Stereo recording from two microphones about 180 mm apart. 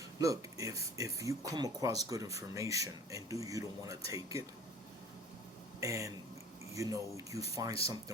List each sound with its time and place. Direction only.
0.2 s speech: 20° right (ahead or behind)
5.8 s speech: 20° right (ahead or behind)